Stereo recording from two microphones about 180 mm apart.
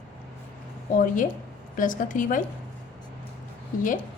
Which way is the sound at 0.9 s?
45° left (ahead or behind).